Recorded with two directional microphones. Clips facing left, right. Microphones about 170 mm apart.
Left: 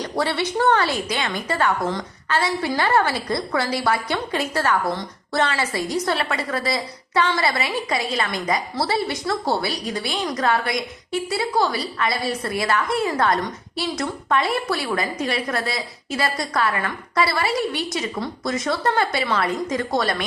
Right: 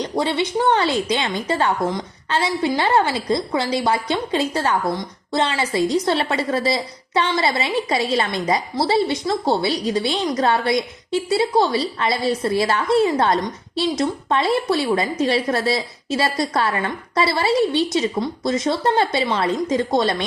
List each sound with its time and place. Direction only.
0.0 s a woman's voice: 20° right (ahead or behind)